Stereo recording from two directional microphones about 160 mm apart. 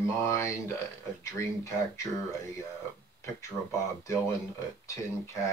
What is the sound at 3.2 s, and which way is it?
Speech, 20° left (ahead or behind).